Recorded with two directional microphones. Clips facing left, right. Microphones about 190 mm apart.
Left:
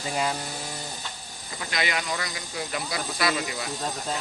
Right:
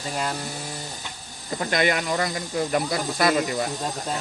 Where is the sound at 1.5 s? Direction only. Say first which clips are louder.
Right 8 dB; 50° right (ahead or behind).